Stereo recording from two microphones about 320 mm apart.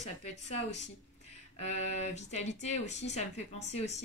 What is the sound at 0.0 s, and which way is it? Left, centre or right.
Speech, left.